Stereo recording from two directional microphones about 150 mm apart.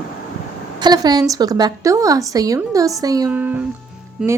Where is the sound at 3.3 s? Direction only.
10° right (ahead or behind).